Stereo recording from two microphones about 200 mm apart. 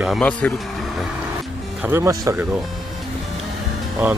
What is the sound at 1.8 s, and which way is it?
Speech, 15° right (ahead or behind).